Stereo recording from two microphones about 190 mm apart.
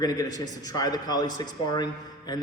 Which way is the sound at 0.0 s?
20° left (ahead or behind).